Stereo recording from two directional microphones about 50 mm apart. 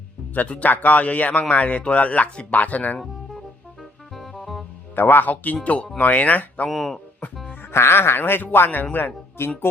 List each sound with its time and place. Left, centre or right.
0.3 s a man's voice: left
4.1 s music: centre
4.9 s a man's voice: left
6.7 s speech: centre
7.6 s speech: left